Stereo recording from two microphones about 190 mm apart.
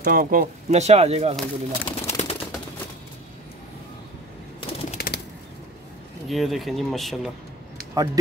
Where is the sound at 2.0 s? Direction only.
35° left (ahead or behind).